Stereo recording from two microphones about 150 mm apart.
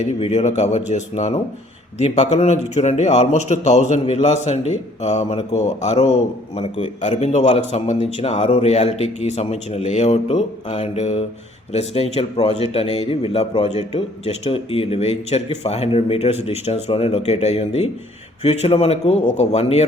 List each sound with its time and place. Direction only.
0.0 s speech: 45° left (ahead or behind)
6.6 s a man's voice: 35° left (ahead or behind)
7.1 s speech: 45° left (ahead or behind)